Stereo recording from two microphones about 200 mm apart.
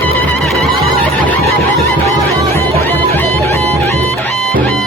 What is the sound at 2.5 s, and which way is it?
Music, 10° left (ahead or behind).